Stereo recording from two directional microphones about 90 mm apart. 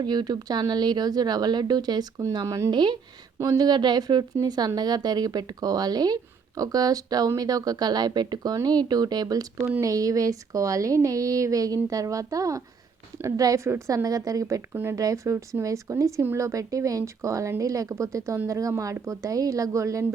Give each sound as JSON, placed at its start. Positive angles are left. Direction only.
{"t": 0.0, "sound": "speech", "side_deg": -50}
{"t": 14.7, "sound": "speech", "side_deg": -25}
{"t": 14.9, "sound": "speech", "side_deg": -40}